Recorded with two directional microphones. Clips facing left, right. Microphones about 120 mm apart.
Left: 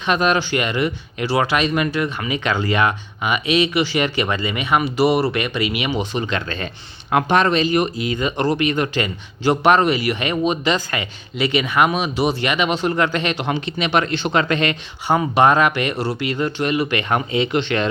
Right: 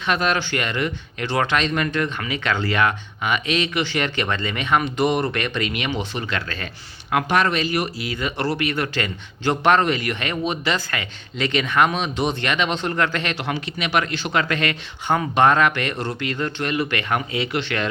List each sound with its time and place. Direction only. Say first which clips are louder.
0.0 s speech: left 3 dB; 15° left (ahead or behind)